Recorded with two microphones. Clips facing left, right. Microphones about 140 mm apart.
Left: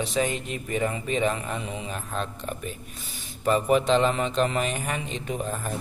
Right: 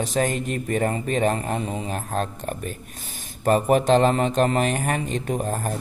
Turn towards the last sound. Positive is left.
turn(degrees=-45)  # may be behind; listen again after turning